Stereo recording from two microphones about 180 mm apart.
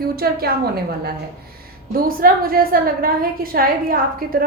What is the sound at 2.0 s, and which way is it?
A woman's voice, 55° right (ahead or behind).